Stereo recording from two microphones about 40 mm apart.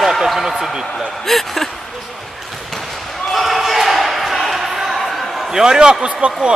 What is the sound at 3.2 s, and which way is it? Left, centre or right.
Basketball bounce, centre.